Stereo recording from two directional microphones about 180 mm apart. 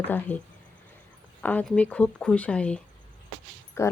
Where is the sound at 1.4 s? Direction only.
10° left (ahead or behind).